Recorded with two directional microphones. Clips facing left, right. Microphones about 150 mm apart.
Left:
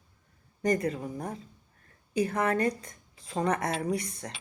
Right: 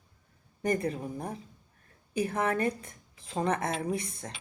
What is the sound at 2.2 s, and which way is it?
Speech, 10° right (ahead or behind).